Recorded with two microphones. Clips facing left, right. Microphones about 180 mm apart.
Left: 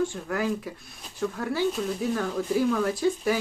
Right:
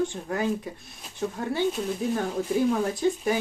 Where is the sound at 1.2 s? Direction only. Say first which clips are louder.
Even; 30° right (ahead or behind).